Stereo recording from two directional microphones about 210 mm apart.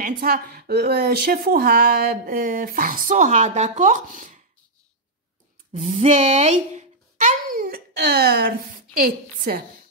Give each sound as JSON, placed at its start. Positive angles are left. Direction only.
{"t": 0.2, "sound": "speech", "side_deg": -45}
{"t": 5.7, "sound": "a sound", "side_deg": -30}
{"t": 8.3, "sound": "speech", "side_deg": -45}